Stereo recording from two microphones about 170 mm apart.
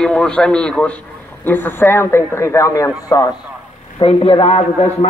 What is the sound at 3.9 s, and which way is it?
Speech, 30° left (ahead or behind).